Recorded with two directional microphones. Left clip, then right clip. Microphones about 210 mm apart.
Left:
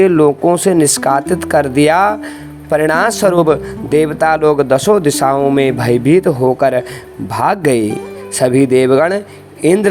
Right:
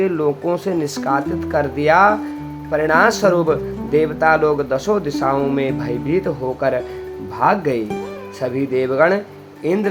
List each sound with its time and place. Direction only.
0.0 s speech: 45° left (ahead or behind)